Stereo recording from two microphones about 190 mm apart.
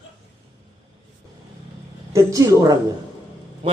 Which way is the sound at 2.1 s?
15° right (ahead or behind).